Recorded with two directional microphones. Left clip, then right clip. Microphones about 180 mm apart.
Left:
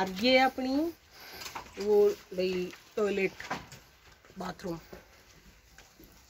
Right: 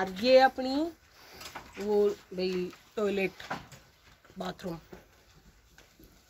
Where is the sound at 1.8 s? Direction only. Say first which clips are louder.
Left 3 dB; 55° right (ahead or behind).